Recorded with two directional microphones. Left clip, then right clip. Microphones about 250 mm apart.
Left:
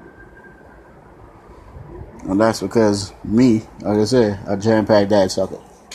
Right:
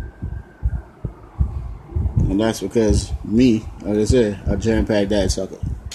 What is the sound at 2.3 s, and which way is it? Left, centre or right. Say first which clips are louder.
Speech: left 3 dB; centre.